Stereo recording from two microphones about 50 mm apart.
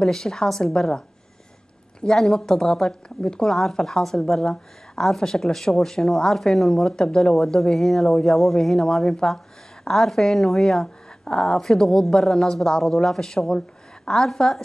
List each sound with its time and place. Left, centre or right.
0.0 s a woman's voice: centre
3.4 s a woman's voice: centre